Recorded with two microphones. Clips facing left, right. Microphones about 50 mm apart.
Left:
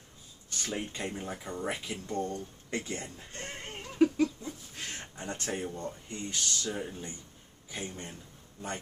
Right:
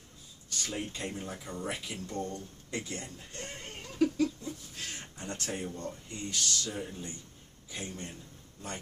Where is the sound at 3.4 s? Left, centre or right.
Centre.